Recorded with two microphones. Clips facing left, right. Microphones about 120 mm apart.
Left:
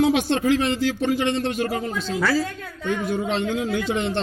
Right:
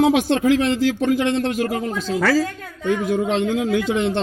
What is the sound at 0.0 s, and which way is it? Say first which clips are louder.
Speech: right 3 dB; 90° right.